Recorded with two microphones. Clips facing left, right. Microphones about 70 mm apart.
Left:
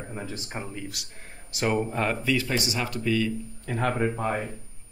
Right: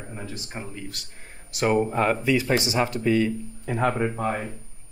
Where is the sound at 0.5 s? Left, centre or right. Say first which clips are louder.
Left 1 dB; centre.